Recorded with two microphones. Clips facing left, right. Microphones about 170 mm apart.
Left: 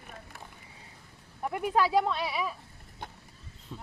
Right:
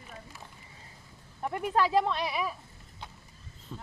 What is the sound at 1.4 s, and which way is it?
Speech, 5° left (ahead or behind).